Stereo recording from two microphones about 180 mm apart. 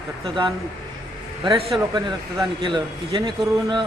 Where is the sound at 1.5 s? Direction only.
30° right (ahead or behind).